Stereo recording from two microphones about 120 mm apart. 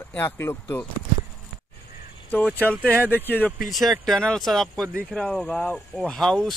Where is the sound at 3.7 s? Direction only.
Centre (ahead or behind).